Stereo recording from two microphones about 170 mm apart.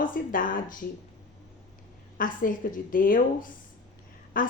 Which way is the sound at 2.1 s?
55° left (ahead or behind).